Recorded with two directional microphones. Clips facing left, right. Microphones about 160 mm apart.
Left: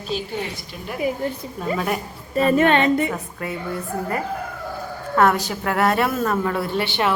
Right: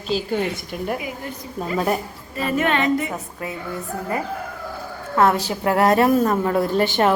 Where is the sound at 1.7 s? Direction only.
30° right (ahead or behind).